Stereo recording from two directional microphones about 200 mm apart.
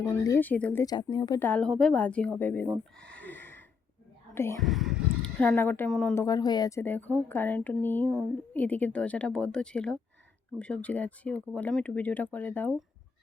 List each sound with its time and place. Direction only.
0.3 s speech: 10° left (ahead or behind)
0.9 s speech: 20° left (ahead or behind)
1.4 s speech: 5° left (ahead or behind)
2.9 s a sound: 5° left (ahead or behind)
4.4 s speech: 10° left (ahead or behind)
4.6 s a sound: centre (ahead or behind)
5.4 s speech: 10° left (ahead or behind)
6.2 s speech: 20° left (ahead or behind)
8.0 s speech: 15° right (ahead or behind)
8.5 s a woman's voice: 5° left (ahead or behind)